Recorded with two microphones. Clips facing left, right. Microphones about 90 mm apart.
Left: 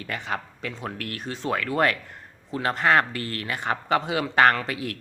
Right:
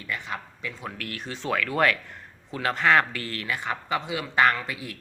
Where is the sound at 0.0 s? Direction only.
70° left (ahead or behind).